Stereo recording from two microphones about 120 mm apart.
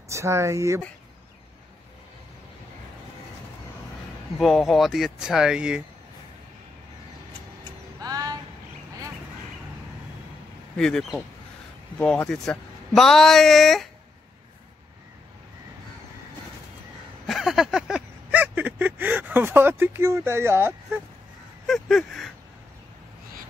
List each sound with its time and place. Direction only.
0.1 s speech: 25° right (ahead or behind)
4.4 s speech: centre (ahead or behind)
8.0 s a sound: 30° right (ahead or behind)
10.8 s speech: 5° left (ahead or behind)
17.3 s a sound: centre (ahead or behind); by 21.0 s 20° right (ahead or behind)
21.6 s speech: centre (ahead or behind)